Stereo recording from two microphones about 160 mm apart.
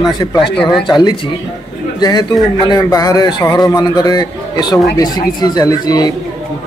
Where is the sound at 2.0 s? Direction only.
25° left (ahead or behind).